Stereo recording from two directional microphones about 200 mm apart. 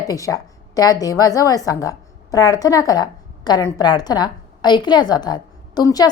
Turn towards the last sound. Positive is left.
turn(degrees=20)  # may be behind; listen again after turning